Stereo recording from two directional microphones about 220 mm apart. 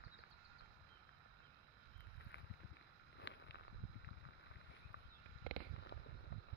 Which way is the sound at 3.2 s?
55° left (ahead or behind).